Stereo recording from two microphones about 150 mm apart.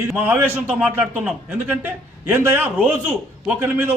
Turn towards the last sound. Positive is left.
turn(degrees=-15)  # may be behind; listen again after turning